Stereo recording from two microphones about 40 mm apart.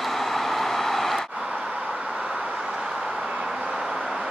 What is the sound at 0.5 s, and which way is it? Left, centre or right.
Vehicle, centre.